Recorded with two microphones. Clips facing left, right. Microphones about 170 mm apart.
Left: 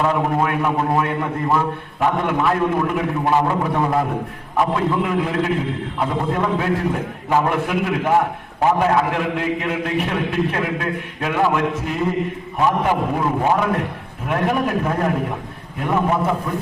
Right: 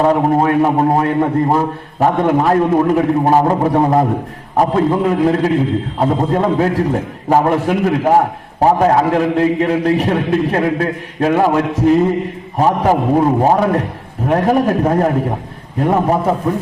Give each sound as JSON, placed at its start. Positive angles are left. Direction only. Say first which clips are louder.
{"t": 0.0, "sound": "a man's voice", "louder": "right 6 dB", "side_deg": -35}